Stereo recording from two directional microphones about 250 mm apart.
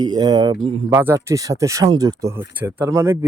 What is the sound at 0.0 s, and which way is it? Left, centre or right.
Speech, centre.